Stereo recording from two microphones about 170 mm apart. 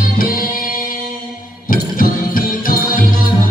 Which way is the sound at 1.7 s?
55° left (ahead or behind).